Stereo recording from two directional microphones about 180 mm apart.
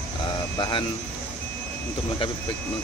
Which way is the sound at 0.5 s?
25° left (ahead or behind).